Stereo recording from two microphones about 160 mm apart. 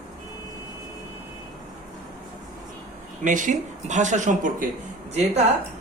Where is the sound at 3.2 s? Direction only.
50° right (ahead or behind).